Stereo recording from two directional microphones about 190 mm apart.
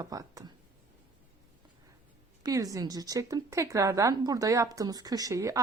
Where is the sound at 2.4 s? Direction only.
20° right (ahead or behind).